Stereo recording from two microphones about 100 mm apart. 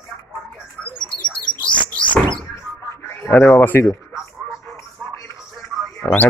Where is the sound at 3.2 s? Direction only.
25° left (ahead or behind).